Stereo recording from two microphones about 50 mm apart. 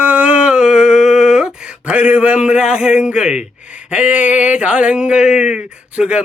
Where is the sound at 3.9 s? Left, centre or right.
Right.